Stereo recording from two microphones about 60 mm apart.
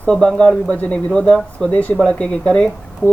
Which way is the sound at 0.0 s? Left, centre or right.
Centre.